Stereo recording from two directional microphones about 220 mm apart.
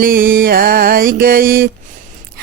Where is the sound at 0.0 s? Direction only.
40° right (ahead or behind).